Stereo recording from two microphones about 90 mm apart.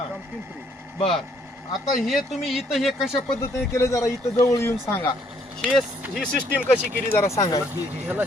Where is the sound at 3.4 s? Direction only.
30° left (ahead or behind).